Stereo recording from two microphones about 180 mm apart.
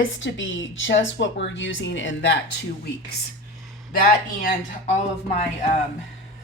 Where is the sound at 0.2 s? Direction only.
90° left.